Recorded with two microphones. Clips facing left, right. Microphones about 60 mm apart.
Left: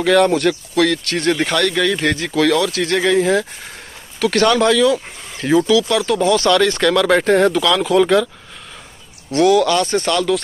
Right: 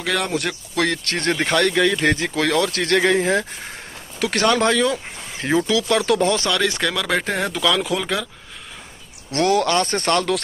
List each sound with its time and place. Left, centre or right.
0.0 s speech: centre
0.7 s speech: right
2.7 s speech: right
3.2 s speech: right
6.5 s speech: centre
9.4 s speech: right